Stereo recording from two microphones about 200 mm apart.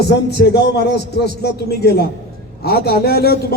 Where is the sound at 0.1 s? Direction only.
55° left (ahead or behind).